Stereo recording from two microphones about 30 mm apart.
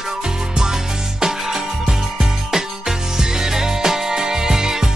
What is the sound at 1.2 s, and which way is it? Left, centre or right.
Music, centre.